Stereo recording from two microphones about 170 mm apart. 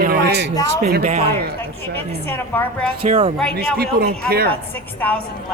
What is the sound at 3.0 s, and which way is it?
Speech, 35° right (ahead or behind).